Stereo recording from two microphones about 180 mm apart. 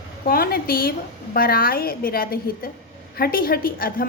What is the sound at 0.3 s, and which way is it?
A woman's voice, 55° left (ahead or behind).